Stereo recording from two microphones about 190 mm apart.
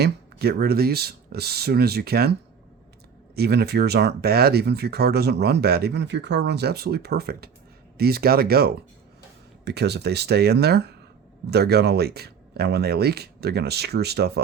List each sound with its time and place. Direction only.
0.0 s speech: 55° right (ahead or behind)
3.3 s speech: 55° right (ahead or behind)